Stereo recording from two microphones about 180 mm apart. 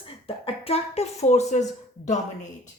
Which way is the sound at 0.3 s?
30° left (ahead or behind).